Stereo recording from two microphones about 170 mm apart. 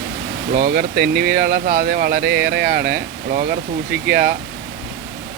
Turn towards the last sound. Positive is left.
turn(degrees=-65)  # may be behind; listen again after turning